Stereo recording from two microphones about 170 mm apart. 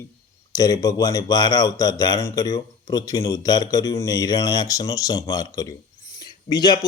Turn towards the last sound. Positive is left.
turn(degrees=25)  # may be behind; listen again after turning